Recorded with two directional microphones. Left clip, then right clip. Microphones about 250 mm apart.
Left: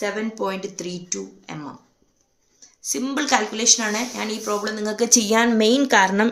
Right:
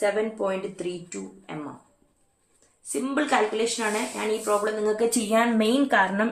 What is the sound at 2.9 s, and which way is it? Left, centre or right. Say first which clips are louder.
A woman's voice: left 3 dB; left.